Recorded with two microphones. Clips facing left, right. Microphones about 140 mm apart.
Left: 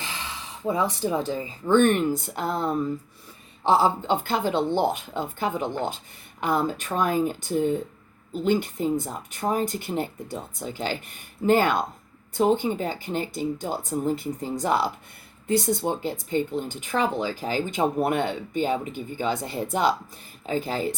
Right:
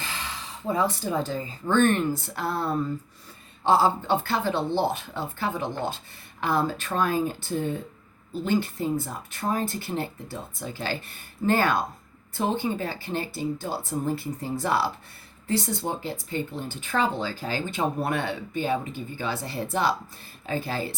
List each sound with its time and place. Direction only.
0.7 s speech: 15° left (ahead or behind)